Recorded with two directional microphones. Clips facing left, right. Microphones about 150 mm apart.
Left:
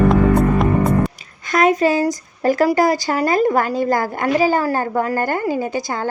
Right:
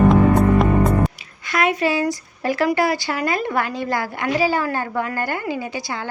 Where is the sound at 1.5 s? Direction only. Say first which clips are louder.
Left 5 dB; 40° left (ahead or behind).